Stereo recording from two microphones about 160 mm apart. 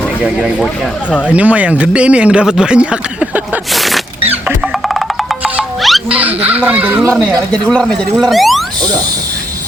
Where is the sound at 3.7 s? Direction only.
Centre (ahead or behind).